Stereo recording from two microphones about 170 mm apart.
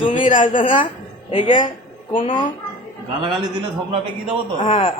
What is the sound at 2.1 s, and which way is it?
Speech, 30° left (ahead or behind).